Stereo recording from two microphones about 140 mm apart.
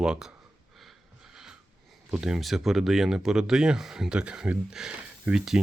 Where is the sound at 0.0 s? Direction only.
5° right (ahead or behind).